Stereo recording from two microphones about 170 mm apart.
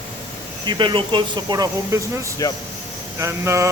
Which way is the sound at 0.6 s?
30° right (ahead or behind).